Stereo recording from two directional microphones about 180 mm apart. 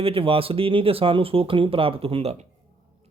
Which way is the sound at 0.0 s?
30° right (ahead or behind).